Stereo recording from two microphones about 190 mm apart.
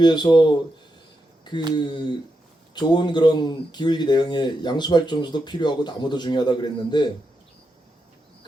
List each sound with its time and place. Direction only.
0.0 s speech: 20° left (ahead or behind)
1.7 s speech: 25° left (ahead or behind)